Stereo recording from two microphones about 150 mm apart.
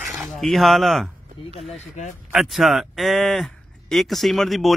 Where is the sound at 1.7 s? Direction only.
55° left (ahead or behind).